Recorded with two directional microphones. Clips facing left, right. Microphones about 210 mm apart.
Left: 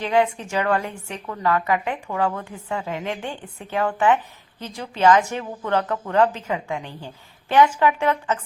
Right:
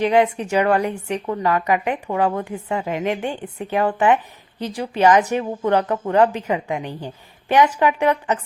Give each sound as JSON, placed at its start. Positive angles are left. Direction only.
{"t": 0.0, "sound": "a woman's voice", "side_deg": -15}